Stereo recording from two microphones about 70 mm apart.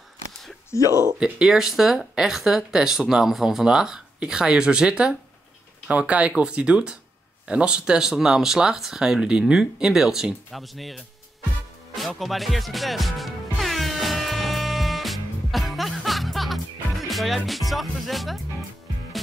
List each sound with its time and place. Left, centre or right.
0.7 s speech: left
1.2 s speech: centre
11.9 s music: centre
17.1 s speech: centre